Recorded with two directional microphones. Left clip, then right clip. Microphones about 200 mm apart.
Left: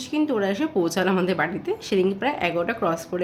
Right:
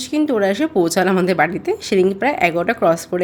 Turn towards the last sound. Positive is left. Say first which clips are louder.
# right 8 dB
turn(degrees=-35)  # may be behind; listen again after turning